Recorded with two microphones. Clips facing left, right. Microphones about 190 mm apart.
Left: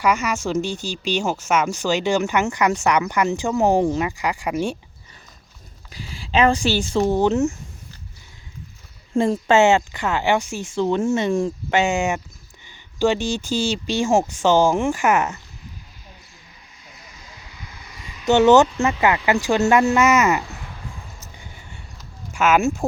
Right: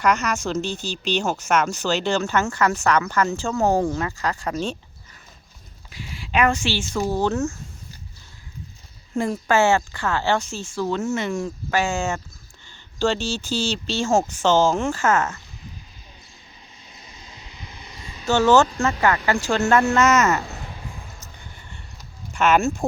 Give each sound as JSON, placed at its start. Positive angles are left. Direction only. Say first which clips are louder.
{"t": 0.0, "sound": "speech", "louder": "left 1 dB", "side_deg": 10}
{"t": 5.9, "sound": "speech", "louder": "left 3 dB", "side_deg": 35}
{"t": 7.0, "sound": "speech", "louder": "left 4 dB", "side_deg": 20}
{"t": 9.1, "sound": "speech", "louder": "left 4 dB", "side_deg": 25}
{"t": 16.9, "sound": "vehicle", "louder": "left 1 dB", "side_deg": -25}
{"t": 18.3, "sound": "speech", "louder": "left 3 dB", "side_deg": 20}
{"t": 21.2, "sound": "a sound", "louder": "left 1 dB", "side_deg": 10}
{"t": 22.3, "sound": "speech", "louder": "left 1 dB", "side_deg": 5}